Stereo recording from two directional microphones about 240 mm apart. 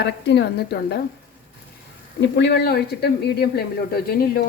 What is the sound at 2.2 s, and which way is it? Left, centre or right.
Speech, left.